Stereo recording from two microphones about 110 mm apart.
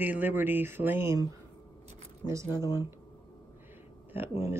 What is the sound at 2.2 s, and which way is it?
Speech, 30° right (ahead or behind).